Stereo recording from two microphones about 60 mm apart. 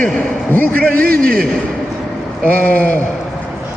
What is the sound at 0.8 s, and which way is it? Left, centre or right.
Speech, centre.